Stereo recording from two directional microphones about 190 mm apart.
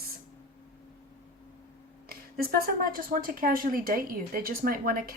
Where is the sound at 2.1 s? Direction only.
50° right (ahead or behind).